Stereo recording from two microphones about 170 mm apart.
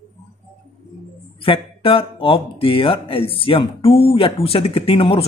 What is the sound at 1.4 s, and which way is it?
Speech, 30° left (ahead or behind).